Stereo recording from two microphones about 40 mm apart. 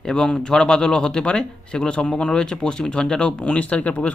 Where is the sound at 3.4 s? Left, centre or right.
Left.